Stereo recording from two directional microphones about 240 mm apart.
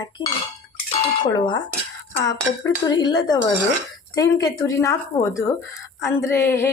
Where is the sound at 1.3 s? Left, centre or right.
Centre.